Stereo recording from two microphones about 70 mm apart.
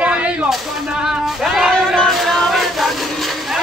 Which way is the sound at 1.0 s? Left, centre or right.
Centre.